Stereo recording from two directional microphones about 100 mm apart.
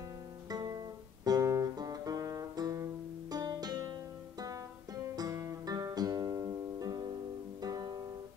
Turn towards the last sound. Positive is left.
turn(degrees=-35)  # may be behind; listen again after turning